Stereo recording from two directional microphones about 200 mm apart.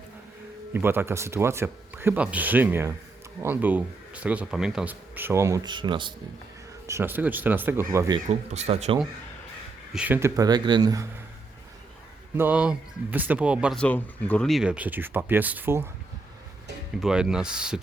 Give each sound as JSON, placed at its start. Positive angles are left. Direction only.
{"t": 0.7, "sound": "speech", "side_deg": -10}
{"t": 6.8, "sound": "speech", "side_deg": -10}
{"t": 8.3, "sound": "speech", "side_deg": -35}
{"t": 9.9, "sound": "speech", "side_deg": -10}
{"t": 12.4, "sound": "speech", "side_deg": -5}
{"t": 13.7, "sound": "speech", "side_deg": 5}
{"t": 17.0, "sound": "speech", "side_deg": -5}